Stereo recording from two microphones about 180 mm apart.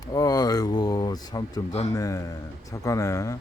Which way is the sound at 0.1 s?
20° left (ahead or behind).